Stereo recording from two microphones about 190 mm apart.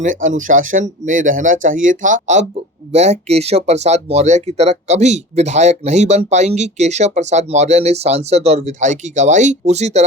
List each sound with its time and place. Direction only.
0.0 s speech: 40° right (ahead or behind)